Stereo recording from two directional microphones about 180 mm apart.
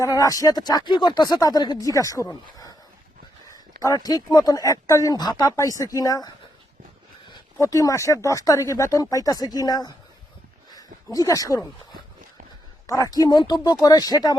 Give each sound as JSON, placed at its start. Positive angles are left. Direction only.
{"t": 0.0, "sound": "speech", "side_deg": 20}
{"t": 12.9, "sound": "speech", "side_deg": 20}